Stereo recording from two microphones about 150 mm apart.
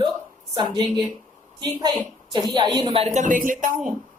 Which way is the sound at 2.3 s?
30° right (ahead or behind).